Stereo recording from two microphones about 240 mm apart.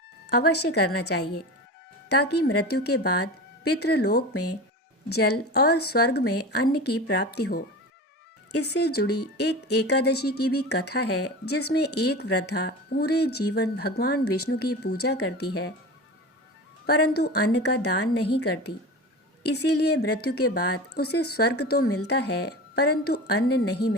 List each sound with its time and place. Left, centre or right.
0.3 s speech: left
16.8 s a woman's voice: left